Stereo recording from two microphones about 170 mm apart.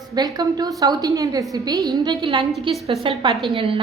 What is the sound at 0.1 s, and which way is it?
A woman's voice, 20° right (ahead or behind).